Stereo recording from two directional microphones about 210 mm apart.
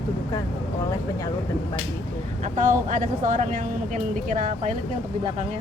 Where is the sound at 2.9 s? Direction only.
40° right (ahead or behind).